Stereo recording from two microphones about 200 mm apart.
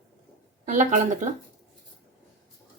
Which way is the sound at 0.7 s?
40° right (ahead or behind).